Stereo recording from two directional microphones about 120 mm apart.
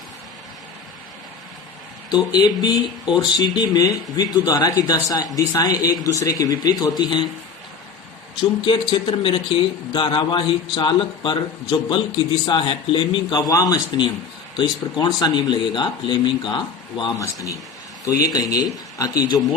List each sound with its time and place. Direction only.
2.0 s speech: 35° left (ahead or behind)
8.4 s speech: 40° left (ahead or behind)
17.2 s speech: 25° left (ahead or behind)